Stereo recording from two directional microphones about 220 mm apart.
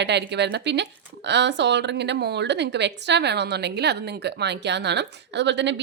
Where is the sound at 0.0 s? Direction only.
50° right (ahead or behind).